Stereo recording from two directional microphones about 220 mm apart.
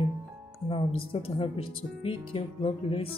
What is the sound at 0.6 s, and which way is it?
Speech, 25° left (ahead or behind).